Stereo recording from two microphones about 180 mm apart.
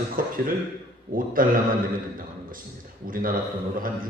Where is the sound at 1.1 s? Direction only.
50° right (ahead or behind).